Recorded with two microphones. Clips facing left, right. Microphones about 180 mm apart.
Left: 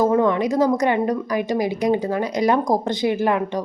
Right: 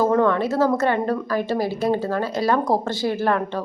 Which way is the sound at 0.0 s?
15° left (ahead or behind).